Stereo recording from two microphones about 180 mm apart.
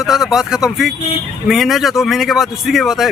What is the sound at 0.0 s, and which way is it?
Speech, centre (ahead or behind).